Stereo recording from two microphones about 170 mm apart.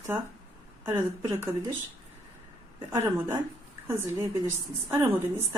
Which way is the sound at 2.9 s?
15° right (ahead or behind).